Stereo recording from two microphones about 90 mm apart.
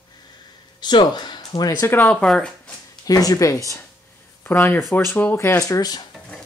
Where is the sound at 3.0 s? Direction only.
45° left (ahead or behind).